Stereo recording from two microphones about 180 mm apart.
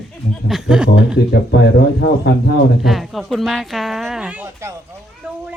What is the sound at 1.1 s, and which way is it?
Speech, 70° left (ahead or behind).